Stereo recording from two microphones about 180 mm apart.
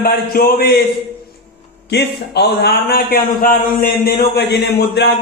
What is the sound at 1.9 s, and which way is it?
A man's voice, 65° left (ahead or behind).